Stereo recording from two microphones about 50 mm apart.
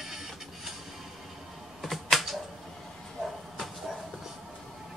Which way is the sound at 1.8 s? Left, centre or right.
Centre.